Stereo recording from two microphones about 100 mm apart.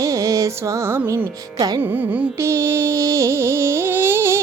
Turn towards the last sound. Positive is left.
turn(degrees=-25)  # may be behind; listen again after turning